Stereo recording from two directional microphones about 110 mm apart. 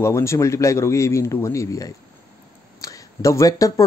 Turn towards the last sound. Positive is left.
turn(degrees=30)  # may be behind; listen again after turning